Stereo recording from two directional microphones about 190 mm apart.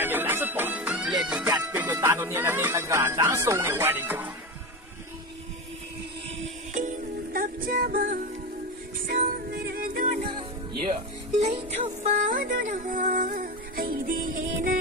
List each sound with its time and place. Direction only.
0.0 s music: 10° right (ahead or behind)
1.6 s speech: 10° right (ahead or behind)
7.3 s music: 50° right (ahead or behind)
11.3 s music: 35° right (ahead or behind)